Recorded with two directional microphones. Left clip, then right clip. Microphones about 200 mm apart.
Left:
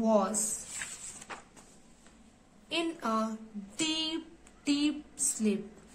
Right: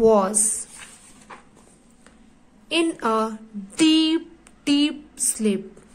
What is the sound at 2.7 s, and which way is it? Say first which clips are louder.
A woman's voice: right 11 dB; 35° right (ahead or behind).